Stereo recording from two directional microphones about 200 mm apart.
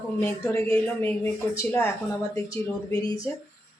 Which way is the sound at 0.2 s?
10° left (ahead or behind).